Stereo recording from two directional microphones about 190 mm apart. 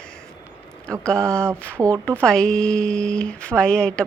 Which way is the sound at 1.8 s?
15° right (ahead or behind).